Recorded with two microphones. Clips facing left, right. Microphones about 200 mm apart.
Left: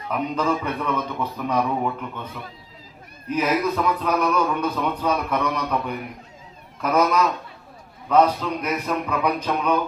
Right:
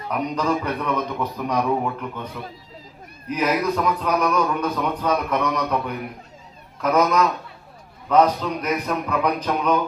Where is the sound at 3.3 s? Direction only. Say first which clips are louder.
Even; 5° left (ahead or behind).